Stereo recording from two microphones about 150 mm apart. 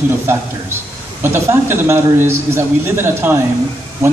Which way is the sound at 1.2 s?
15° right (ahead or behind).